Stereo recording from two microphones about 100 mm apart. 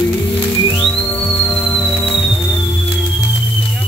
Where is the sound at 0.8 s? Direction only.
15° left (ahead or behind).